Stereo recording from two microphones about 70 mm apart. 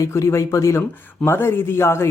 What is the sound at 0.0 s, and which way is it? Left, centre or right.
Speech, left.